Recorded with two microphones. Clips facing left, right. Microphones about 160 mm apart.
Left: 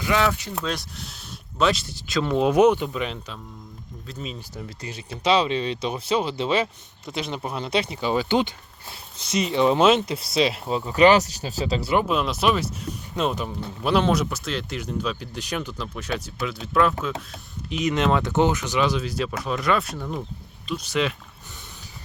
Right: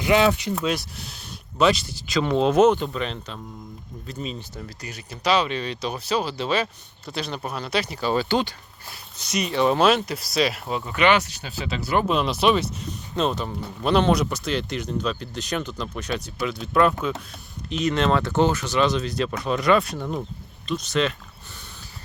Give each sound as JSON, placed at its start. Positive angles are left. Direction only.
{"t": 0.0, "sound": "speech", "side_deg": -20}
{"t": 0.6, "sound": "speech", "side_deg": -10}
{"t": 4.8, "sound": "speech", "side_deg": 25}
{"t": 11.9, "sound": "speech", "side_deg": 5}
{"t": 17.7, "sound": "speech", "side_deg": 15}
{"t": 20.7, "sound": "speech", "side_deg": 10}